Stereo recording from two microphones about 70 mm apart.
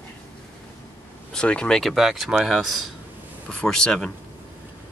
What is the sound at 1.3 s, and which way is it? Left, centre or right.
Speech, centre.